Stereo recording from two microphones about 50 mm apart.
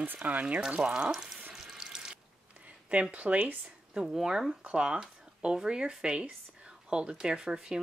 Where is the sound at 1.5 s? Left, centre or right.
Centre.